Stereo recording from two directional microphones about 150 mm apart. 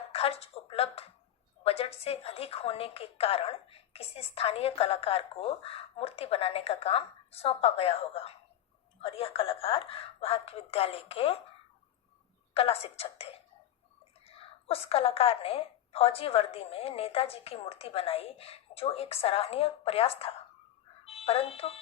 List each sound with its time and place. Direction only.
0.1 s a woman's voice: 40° left (ahead or behind)
12.5 s a woman's voice: 40° left (ahead or behind)